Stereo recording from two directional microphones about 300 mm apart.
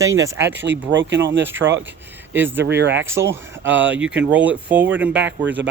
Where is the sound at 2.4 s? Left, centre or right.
Centre.